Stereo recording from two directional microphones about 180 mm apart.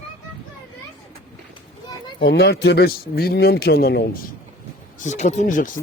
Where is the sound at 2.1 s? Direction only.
65° left (ahead or behind).